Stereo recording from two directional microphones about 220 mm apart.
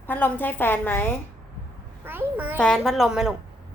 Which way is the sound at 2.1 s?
10° right (ahead or behind).